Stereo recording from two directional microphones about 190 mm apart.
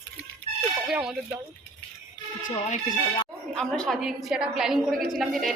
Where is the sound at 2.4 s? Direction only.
45° left (ahead or behind).